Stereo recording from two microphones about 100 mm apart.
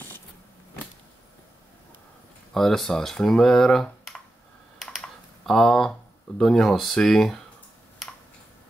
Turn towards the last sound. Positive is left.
turn(degrees=5)  # may be behind; listen again after turning